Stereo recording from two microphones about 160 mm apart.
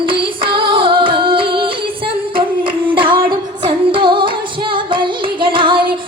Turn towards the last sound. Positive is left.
turn(degrees=-30)  # may be behind; listen again after turning